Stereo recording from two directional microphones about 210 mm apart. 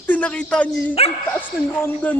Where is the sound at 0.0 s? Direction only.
5° left (ahead or behind).